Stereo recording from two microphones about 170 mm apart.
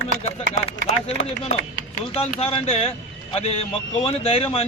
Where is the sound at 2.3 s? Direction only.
35° left (ahead or behind).